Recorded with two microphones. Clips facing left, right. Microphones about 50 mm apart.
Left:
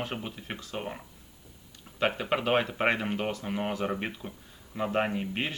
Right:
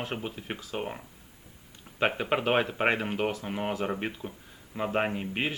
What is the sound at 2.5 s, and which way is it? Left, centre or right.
Speech, centre.